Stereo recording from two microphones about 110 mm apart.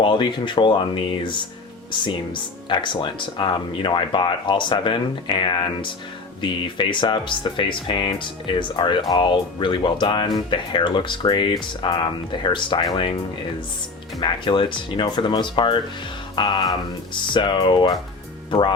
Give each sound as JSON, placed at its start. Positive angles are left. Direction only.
{"t": 0.0, "sound": "speech", "side_deg": 45}
{"t": 6.4, "sound": "speech", "side_deg": 45}
{"t": 14.2, "sound": "speech", "side_deg": 45}
{"t": 16.3, "sound": "music", "side_deg": 45}
{"t": 17.3, "sound": "speech", "side_deg": 45}